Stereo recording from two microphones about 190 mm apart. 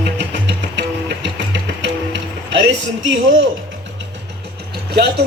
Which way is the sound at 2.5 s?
70° right (ahead or behind).